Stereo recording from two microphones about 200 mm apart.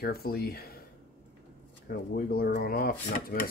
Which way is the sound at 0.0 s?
50° left (ahead or behind).